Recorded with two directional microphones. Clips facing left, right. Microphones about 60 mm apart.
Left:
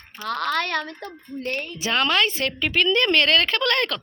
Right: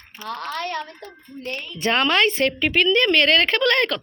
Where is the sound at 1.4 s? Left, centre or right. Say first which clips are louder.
Left 2 dB; left.